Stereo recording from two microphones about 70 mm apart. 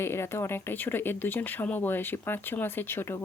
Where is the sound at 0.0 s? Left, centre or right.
Left.